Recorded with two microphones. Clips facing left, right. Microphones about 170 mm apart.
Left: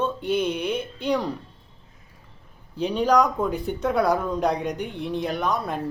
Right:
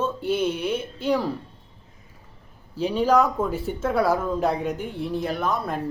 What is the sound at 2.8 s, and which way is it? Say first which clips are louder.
Speech: even; 5° right (ahead or behind).